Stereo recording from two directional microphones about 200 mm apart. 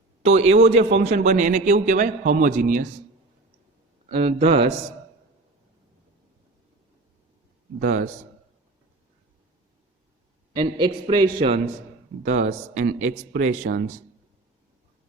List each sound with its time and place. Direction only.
0.3 s a man's voice: 35° right (ahead or behind)
4.1 s a man's voice: 30° right (ahead or behind)
7.8 s a man's voice: 40° right (ahead or behind)
10.5 s a man's voice: 25° right (ahead or behind); by 13.7 s 45° right (ahead or behind)